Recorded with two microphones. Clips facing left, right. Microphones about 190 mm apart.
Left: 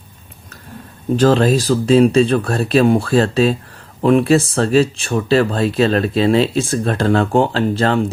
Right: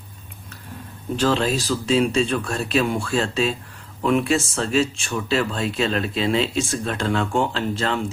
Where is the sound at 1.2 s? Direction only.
45° left (ahead or behind).